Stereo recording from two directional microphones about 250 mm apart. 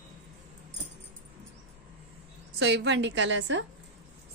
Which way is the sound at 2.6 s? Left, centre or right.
Right.